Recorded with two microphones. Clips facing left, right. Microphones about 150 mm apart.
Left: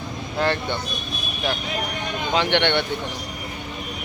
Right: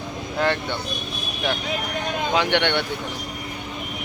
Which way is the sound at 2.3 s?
10° right (ahead or behind).